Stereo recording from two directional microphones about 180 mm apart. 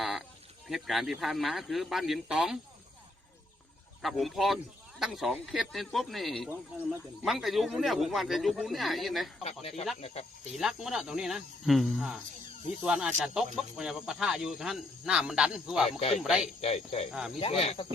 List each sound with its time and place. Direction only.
0.0 s sheep: centre (ahead or behind)
0.7 s speech: centre (ahead or behind)
4.0 s speech: centre (ahead or behind)
9.4 s speech: 35° left (ahead or behind)
10.6 s speech: centre (ahead or behind)
16.0 s speech: 35° left (ahead or behind)
17.1 s speech: 5° right (ahead or behind)
17.4 s speech: 30° left (ahead or behind)